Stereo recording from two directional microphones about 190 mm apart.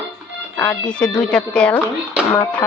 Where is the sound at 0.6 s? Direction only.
5° left (ahead or behind).